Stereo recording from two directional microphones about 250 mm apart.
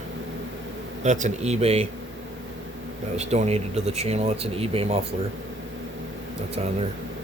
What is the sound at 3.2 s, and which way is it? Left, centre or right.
Speech, right.